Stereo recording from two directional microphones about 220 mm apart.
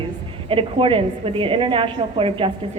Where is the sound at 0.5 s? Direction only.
25° right (ahead or behind).